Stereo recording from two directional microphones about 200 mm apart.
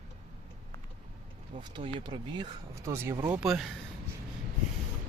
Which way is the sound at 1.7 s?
25° right (ahead or behind).